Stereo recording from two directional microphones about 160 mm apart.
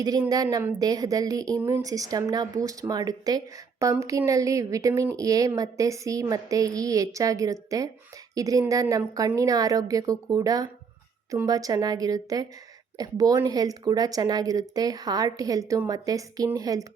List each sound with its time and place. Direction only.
0.0 s speech: 25° right (ahead or behind)